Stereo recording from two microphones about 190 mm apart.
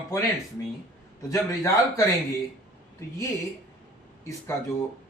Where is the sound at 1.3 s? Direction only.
15° left (ahead or behind).